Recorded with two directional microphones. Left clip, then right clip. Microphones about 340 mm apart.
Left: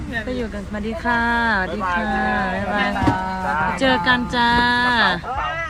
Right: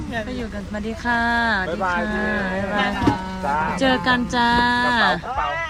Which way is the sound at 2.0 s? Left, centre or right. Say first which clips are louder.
Left 3 dB; centre.